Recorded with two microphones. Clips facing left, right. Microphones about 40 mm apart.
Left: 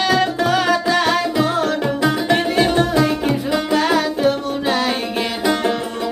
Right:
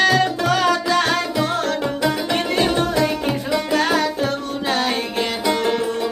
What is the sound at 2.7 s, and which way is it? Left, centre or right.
Music, centre.